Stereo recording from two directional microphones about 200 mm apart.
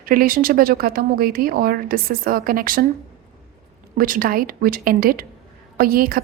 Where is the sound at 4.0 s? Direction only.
45° right (ahead or behind).